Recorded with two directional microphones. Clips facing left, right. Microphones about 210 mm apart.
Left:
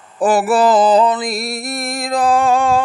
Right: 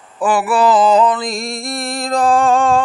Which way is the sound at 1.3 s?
5° left (ahead or behind).